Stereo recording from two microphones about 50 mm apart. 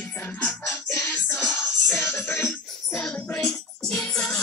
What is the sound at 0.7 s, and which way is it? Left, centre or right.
Music, left.